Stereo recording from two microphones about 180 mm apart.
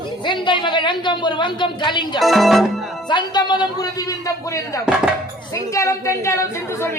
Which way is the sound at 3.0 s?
25° left (ahead or behind).